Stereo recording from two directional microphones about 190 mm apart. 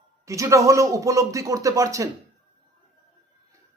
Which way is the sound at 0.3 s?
15° right (ahead or behind).